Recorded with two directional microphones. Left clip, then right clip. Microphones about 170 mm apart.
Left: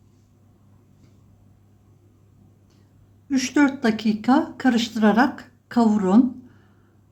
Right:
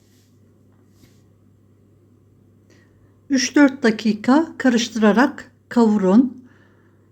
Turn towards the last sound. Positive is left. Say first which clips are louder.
# right 3 dB
turn(degrees=-15)  # may be behind; listen again after turning